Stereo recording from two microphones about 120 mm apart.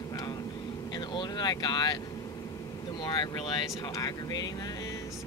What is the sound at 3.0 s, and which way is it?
Speech, 35° left (ahead or behind).